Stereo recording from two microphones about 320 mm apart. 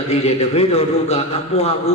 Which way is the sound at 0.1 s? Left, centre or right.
Centre.